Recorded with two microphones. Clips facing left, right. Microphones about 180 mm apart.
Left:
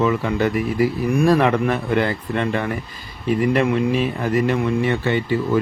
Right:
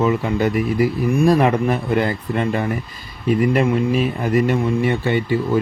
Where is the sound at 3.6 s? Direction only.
10° right (ahead or behind).